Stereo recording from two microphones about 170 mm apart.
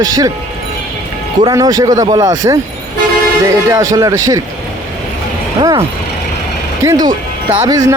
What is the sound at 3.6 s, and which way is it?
Speech, 20° right (ahead or behind).